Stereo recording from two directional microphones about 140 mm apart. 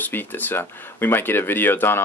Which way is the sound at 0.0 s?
15° left (ahead or behind).